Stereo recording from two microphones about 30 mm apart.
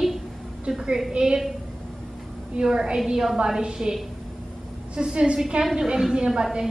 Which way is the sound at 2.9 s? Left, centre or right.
Centre.